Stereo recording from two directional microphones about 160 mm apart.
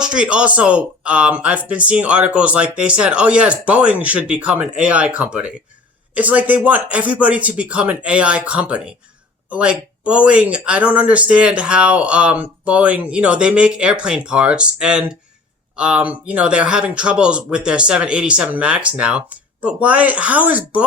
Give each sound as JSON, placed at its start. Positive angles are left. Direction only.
{"t": 0.0, "sound": "speech", "side_deg": -5}